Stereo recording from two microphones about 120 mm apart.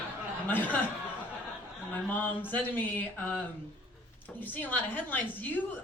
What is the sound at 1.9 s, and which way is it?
Speech, 15° left (ahead or behind).